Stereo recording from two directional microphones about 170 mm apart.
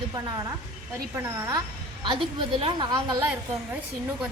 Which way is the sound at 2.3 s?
30° right (ahead or behind).